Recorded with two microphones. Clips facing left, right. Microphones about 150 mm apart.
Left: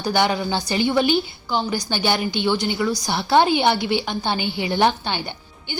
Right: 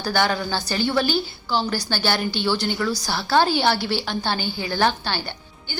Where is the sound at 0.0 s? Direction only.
20° left (ahead or behind).